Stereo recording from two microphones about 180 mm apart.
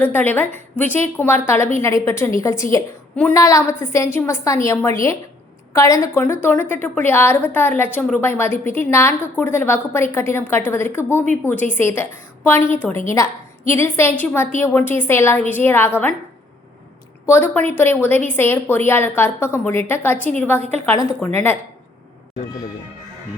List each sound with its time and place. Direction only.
0.0 s a woman's voice: 10° left (ahead or behind)
17.2 s a woman's voice: 10° left (ahead or behind)
20.6 s a woman's voice: 35° right (ahead or behind)
20.8 s a woman's voice: 15° left (ahead or behind)